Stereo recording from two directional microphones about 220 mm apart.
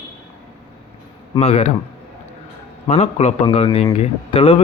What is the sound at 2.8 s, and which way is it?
A man's voice, 30° left (ahead or behind).